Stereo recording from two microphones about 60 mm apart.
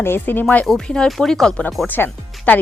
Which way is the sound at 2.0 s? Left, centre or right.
Left.